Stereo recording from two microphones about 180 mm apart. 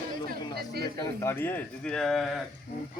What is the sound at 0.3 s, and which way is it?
Chatter, 60° right (ahead or behind).